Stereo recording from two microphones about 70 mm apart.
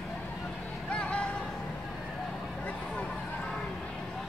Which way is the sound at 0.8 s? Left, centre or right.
Centre.